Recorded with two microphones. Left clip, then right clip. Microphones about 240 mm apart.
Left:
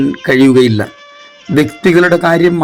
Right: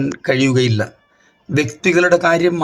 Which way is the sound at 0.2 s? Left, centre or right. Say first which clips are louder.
Left 7 dB; centre.